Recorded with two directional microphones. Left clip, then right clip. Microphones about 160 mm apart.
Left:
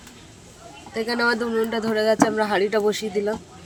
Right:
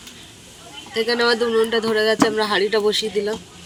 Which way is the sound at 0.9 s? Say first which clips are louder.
Right 4 dB; 55° left (ahead or behind).